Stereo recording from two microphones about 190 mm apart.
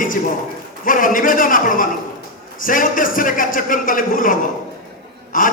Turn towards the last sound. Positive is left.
turn(degrees=45)  # may be behind; listen again after turning